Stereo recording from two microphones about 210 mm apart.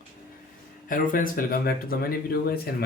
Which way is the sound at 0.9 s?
40° left (ahead or behind).